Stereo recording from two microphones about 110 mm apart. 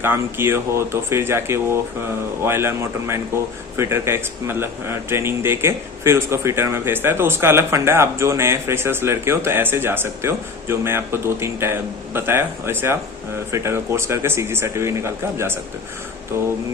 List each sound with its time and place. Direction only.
0.0 s a man's voice: 20° right (ahead or behind)